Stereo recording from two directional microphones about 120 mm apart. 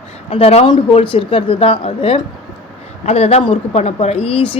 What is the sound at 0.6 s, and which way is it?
Speech, 40° left (ahead or behind).